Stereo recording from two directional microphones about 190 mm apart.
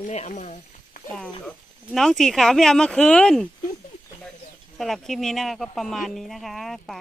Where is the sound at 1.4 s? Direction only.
Centre (ahead or behind).